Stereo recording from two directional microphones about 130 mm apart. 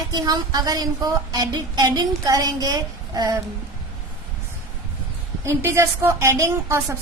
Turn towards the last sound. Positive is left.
turn(degrees=-25)  # may be behind; listen again after turning